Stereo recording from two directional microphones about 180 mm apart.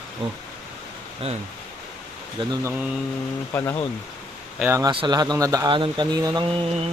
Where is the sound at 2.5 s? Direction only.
15° right (ahead or behind).